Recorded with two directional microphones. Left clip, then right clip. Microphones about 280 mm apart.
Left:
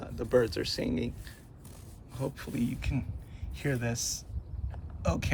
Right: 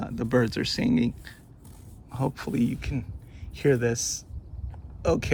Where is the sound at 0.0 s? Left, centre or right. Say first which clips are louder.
Right 2 dB; centre.